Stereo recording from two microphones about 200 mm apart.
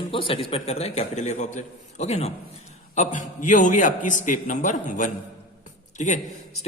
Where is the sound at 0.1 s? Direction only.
25° left (ahead or behind).